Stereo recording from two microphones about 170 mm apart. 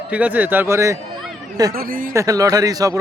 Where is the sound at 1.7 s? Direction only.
55° right (ahead or behind).